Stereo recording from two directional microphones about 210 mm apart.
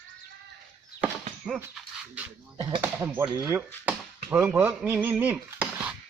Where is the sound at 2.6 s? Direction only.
20° right (ahead or behind).